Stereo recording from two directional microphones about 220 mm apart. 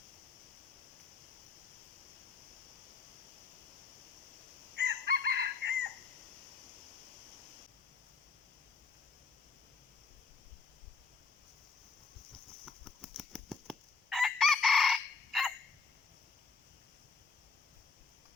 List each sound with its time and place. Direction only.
4.8 s chicken: 50° right (ahead or behind)
12.6 s fowl: centre (ahead or behind)